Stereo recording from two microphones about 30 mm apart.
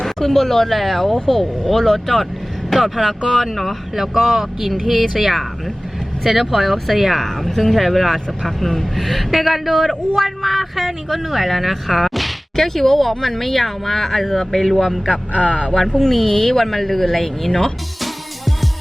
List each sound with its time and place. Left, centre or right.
0.0 s speech: centre
7.2 s speech: centre
12.5 s speech: centre
15.4 s speech: left
16.0 s speech: centre
18.0 s music: centre